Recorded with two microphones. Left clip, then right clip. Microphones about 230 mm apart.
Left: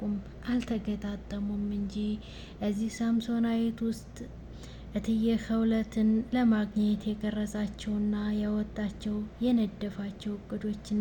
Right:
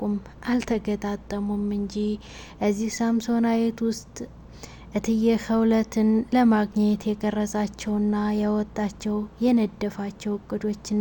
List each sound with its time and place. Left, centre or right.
0.4 s a woman's voice: right
4.9 s a woman's voice: right